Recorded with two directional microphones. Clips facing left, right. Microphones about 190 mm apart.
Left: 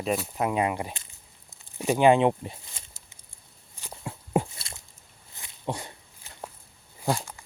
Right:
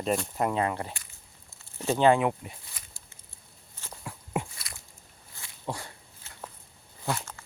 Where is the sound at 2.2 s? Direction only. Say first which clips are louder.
Left 5 dB; 30° left (ahead or behind).